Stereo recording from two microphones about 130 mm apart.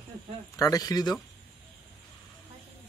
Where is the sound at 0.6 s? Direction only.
30° left (ahead or behind).